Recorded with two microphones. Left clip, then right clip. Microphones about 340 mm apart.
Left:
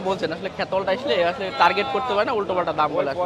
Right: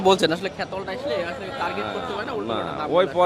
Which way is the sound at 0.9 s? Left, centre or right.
Centre.